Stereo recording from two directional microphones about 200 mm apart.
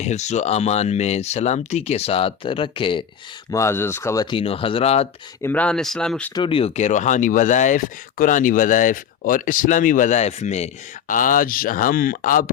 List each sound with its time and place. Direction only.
0.0 s speech: 35° left (ahead or behind)
3.5 s speech: 15° left (ahead or behind); by 5.0 s 30° left (ahead or behind)
5.4 s speech: 10° left (ahead or behind)
6.3 s speech: 25° left (ahead or behind); by 12.5 s 45° left (ahead or behind)